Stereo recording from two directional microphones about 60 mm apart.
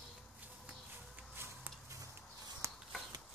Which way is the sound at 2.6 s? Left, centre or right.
Right.